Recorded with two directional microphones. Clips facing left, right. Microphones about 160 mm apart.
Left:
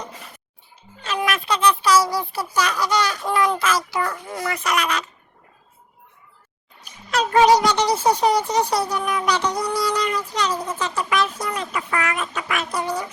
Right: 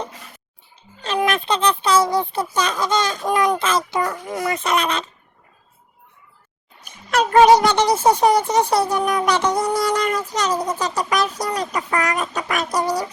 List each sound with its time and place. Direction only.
1.0 s speech: 25° right (ahead or behind)
6.8 s music: 55° right (ahead or behind)
7.6 s speech: 55° right (ahead or behind); by 13.1 s 40° right (ahead or behind)